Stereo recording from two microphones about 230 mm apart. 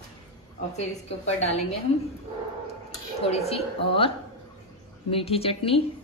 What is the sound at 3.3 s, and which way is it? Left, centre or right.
A woman's voice, left.